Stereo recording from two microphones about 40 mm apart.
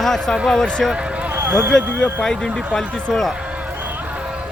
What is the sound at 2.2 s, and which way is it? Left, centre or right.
Speech, centre.